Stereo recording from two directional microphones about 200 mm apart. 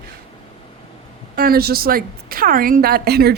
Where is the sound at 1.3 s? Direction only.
50° right (ahead or behind).